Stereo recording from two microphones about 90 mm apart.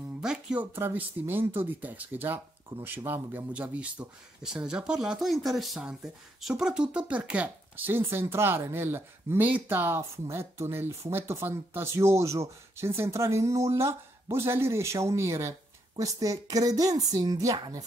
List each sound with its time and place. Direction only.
0.2 s speech: 10° right (ahead or behind)
0.9 s speech: 25° right (ahead or behind); by 17.8 s 40° right (ahead or behind)